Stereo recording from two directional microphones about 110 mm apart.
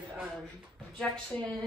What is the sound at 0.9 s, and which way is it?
Speech, 5° left (ahead or behind).